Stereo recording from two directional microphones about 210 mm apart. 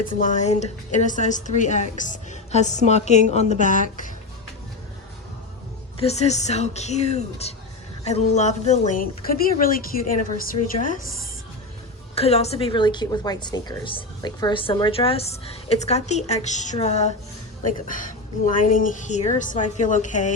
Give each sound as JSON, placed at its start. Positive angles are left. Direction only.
{"t": 0.2, "sound": "a woman's voice", "side_deg": 35}
{"t": 6.0, "sound": "a woman's voice", "side_deg": 30}
{"t": 12.1, "sound": "a woman's voice", "side_deg": 30}